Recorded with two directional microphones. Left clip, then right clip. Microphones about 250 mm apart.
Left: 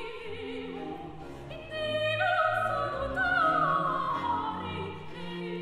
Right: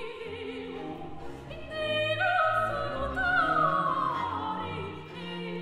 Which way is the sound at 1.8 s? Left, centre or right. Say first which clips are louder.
Right 1 dB; centre.